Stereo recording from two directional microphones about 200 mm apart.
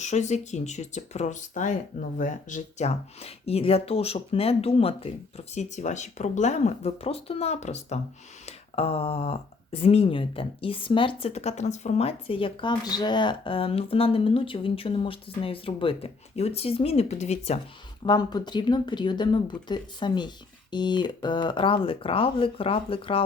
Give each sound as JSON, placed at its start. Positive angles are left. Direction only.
{"t": 0.0, "sound": "speech", "side_deg": 35}
{"t": 18.0, "sound": "speech", "side_deg": 20}